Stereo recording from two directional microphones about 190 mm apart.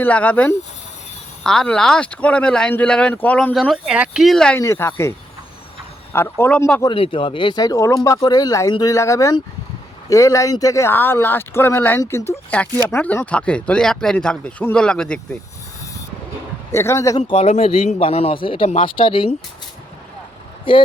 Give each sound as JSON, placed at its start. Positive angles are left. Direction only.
{"t": 0.0, "sound": "speech", "side_deg": 10}
{"t": 6.1, "sound": "speech", "side_deg": 10}
{"t": 6.8, "sound": "a man's voice", "side_deg": 25}
{"t": 16.7, "sound": "a man's voice", "side_deg": 15}